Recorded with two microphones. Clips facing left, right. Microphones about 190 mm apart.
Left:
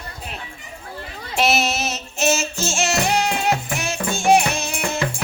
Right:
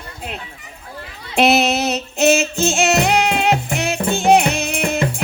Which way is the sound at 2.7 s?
60° right (ahead or behind).